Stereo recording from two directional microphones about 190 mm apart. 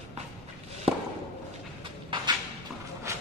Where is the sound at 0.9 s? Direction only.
30° right (ahead or behind).